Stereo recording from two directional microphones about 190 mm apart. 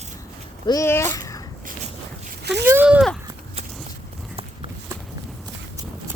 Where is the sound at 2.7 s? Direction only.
10° right (ahead or behind).